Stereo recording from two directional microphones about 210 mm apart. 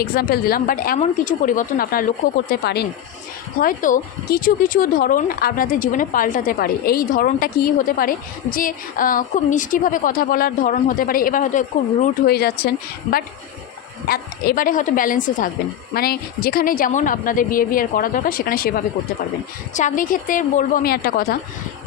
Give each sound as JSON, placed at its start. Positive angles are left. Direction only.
{"t": 0.0, "sound": "a woman's voice", "side_deg": 45}